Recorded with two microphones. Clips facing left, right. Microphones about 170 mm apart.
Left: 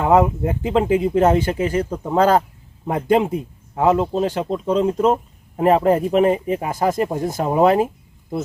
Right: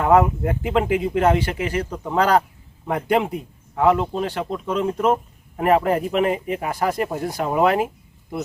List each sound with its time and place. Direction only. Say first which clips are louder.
0.0 s a man's voice: left 1 dB; 20° left (ahead or behind)